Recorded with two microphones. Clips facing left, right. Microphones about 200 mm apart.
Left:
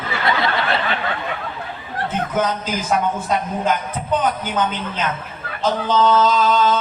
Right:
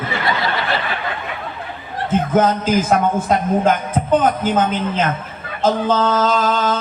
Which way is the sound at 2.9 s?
50° right (ahead or behind).